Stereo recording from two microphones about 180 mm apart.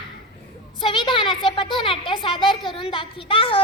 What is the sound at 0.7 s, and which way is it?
A woman's voice, 25° left (ahead or behind).